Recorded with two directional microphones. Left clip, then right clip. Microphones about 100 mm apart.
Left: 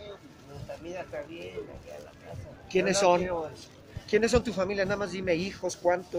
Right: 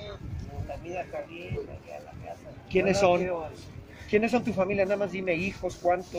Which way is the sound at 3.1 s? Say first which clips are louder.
Even; 40° left (ahead or behind).